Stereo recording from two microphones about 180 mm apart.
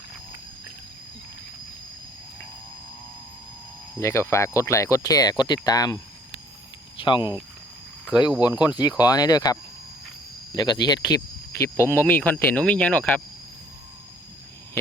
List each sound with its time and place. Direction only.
4.0 s speech: 15° left (ahead or behind)
7.0 s speech: 25° left (ahead or behind)
8.4 s speech: 20° left (ahead or behind)